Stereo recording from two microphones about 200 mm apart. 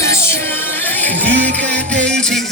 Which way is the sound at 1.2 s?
60° right (ahead or behind).